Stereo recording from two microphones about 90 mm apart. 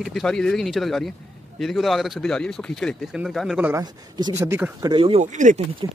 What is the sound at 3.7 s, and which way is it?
Speech, 50° right (ahead or behind).